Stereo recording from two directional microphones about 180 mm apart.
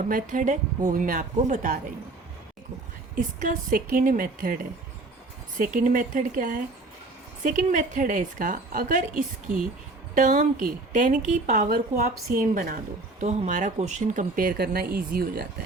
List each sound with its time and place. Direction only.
0.1 s speech: 50° right (ahead or behind)
3.2 s speech: 50° right (ahead or behind)
5.5 s speech: 45° right (ahead or behind)